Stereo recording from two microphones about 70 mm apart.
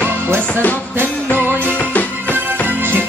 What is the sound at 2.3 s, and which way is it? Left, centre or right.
Music, right.